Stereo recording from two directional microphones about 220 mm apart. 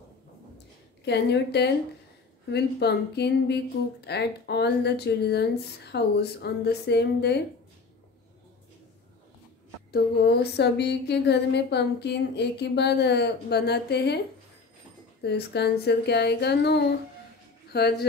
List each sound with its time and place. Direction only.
1.0 s speech: 50° left (ahead or behind)
9.8 s speech: 45° left (ahead or behind)
15.2 s speech: 50° left (ahead or behind)